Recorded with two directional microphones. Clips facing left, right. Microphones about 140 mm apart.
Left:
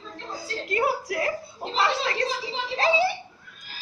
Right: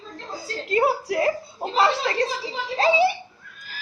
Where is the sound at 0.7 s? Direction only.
25° right (ahead or behind).